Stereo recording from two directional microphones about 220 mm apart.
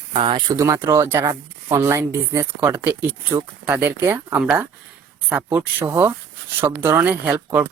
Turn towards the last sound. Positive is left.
turn(degrees=-5)  # may be behind; listen again after turning